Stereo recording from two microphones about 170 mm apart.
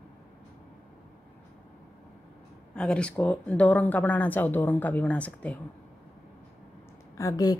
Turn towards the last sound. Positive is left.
turn(degrees=20)  # may be behind; listen again after turning